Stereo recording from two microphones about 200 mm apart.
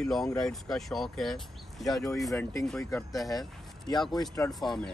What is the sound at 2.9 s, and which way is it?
Speech, 15° left (ahead or behind).